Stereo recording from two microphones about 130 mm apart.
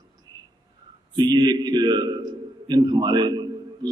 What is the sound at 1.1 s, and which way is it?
A man's voice, 30° right (ahead or behind).